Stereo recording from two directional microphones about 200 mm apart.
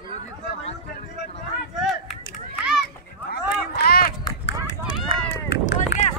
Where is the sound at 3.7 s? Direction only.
50° left (ahead or behind).